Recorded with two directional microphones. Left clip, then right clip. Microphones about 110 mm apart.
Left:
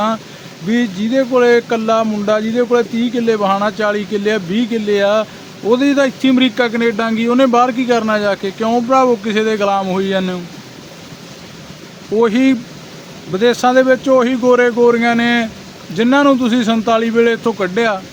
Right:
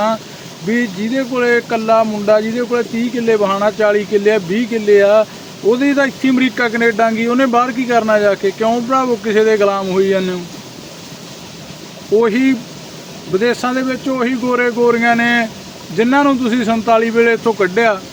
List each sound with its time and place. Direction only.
0.7 s speech: 20° left (ahead or behind)
12.2 s speech: 20° left (ahead or behind)